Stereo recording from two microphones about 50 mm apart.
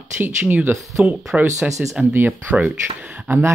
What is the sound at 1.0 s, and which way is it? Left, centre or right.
Speech, centre.